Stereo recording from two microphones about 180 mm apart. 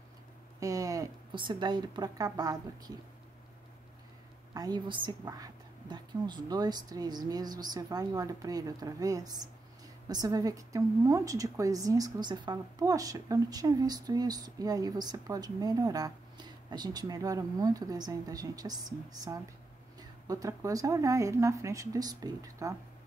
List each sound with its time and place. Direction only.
0.6 s speech: 20° right (ahead or behind)
4.6 s a woman's voice: 25° right (ahead or behind)